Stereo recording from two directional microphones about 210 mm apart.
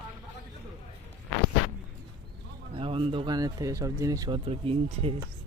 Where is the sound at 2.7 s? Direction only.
25° right (ahead or behind).